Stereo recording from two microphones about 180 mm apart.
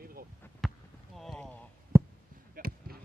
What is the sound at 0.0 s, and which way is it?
Basketball bounce, 55° right (ahead or behind).